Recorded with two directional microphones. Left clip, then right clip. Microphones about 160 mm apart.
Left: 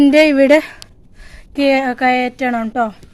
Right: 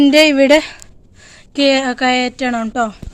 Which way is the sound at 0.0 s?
5° left (ahead or behind).